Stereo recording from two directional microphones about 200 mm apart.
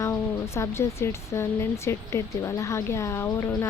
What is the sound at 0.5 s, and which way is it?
Speech, 15° left (ahead or behind).